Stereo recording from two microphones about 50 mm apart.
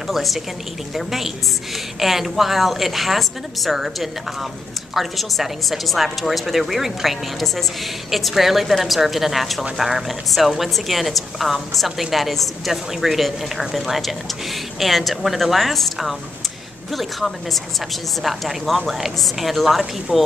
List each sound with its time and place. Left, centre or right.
0.1 s a woman's voice: centre